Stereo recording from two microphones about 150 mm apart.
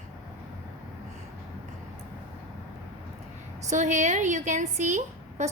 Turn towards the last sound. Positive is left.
turn(degrees=-50)  # may be behind; listen again after turning